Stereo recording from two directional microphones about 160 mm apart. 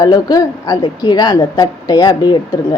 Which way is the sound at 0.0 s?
25° left (ahead or behind).